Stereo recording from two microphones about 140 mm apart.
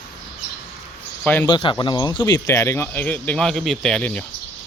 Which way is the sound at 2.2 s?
20° left (ahead or behind).